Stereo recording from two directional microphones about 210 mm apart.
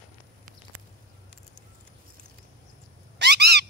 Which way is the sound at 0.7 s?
90° right.